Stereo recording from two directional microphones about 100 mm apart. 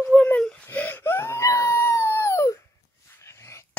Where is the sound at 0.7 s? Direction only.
20° left (ahead or behind).